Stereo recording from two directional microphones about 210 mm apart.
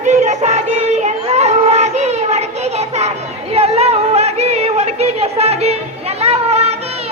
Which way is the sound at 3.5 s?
30° right (ahead or behind).